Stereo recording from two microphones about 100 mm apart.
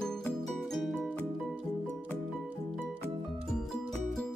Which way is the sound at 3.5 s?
5° left (ahead or behind).